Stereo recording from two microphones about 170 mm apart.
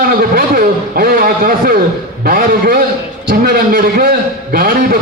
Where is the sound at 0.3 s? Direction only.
55° right (ahead or behind).